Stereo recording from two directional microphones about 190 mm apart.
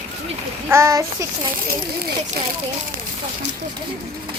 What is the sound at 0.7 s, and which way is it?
Speech, 15° right (ahead or behind).